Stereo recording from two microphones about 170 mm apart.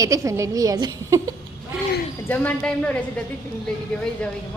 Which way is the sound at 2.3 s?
10° left (ahead or behind).